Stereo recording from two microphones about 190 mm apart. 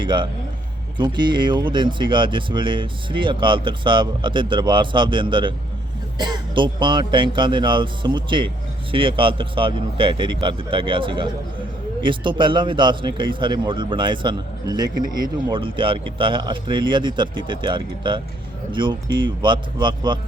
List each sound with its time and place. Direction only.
0.0 s speech: 25° right (ahead or behind)
12.4 s speech: 25° right (ahead or behind)